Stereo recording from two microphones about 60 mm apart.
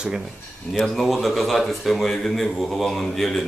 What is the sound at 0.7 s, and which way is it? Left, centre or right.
Speech, centre.